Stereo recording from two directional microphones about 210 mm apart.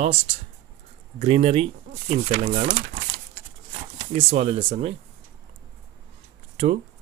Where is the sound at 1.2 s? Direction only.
25° right (ahead or behind).